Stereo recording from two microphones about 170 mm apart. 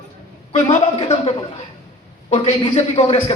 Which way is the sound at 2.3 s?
35° left (ahead or behind).